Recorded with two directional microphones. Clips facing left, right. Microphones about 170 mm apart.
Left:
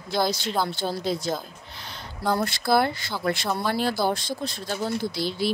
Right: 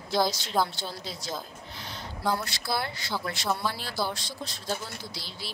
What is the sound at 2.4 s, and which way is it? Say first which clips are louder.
A woman's voice: left 10 dB; 55° left (ahead or behind).